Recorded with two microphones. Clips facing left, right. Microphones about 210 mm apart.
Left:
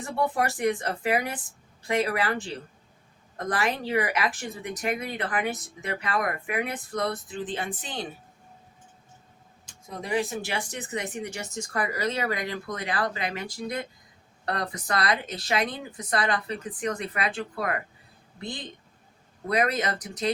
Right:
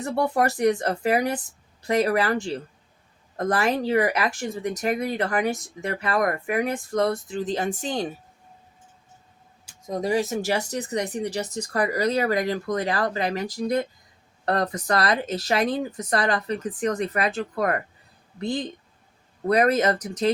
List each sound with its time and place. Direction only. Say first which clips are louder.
0.0 s speech: right 4 dB; 40° right (ahead or behind)
9.8 s speech: right 5 dB; 40° right (ahead or behind)
19.5 s speech: right 6 dB; 40° right (ahead or behind)